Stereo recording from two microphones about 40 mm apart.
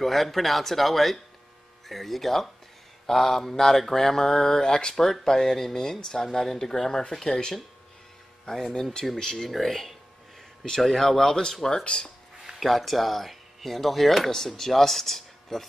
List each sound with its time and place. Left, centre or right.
0.0 s speech: centre
9.5 s speech: centre; by 12.1 s left
12.5 s speech: centre